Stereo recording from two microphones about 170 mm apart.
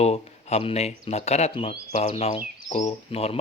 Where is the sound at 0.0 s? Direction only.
40° left (ahead or behind).